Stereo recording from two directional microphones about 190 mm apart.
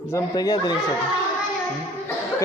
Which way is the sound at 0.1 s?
15° left (ahead or behind).